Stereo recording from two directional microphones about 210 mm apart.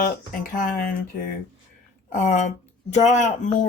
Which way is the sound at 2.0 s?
35° left (ahead or behind).